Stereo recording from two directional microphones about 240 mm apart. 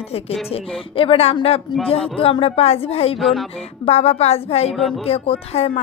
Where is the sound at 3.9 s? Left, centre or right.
Left.